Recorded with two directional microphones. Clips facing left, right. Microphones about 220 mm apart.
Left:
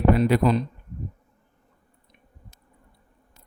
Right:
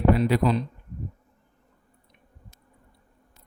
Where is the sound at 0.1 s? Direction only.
50° left (ahead or behind).